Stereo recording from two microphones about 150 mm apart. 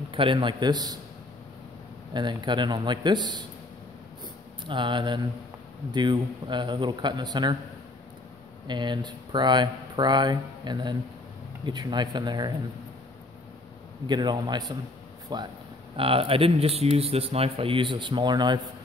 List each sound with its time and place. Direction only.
0.1 s speech: 35° right (ahead or behind)
2.1 s speech: 30° right (ahead or behind)
4.6 s speech: 30° right (ahead or behind)
8.6 s speech: 30° right (ahead or behind)
14.0 s speech: 30° right (ahead or behind)
16.0 s speech: 40° right (ahead or behind)